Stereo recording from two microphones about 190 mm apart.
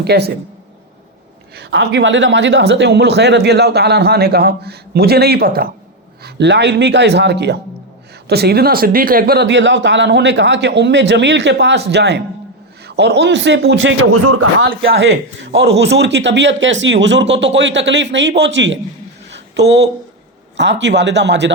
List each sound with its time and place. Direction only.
0.0 s speech: 60° right (ahead or behind)
1.5 s a man's voice: 65° right (ahead or behind)
6.2 s a man's voice: 65° right (ahead or behind); by 14.1 s 90° right
14.8 s a man's voice: 60° right (ahead or behind)
19.3 s a sound: 65° right (ahead or behind)
20.6 s a man's voice: 65° right (ahead or behind)